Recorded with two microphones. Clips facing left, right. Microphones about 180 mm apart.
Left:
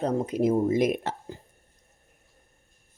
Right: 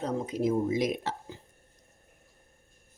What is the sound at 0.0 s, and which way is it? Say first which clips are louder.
Speech: left 5 dB; 55° left (ahead or behind).